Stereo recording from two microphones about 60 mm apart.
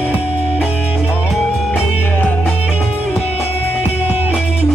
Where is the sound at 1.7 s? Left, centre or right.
Left.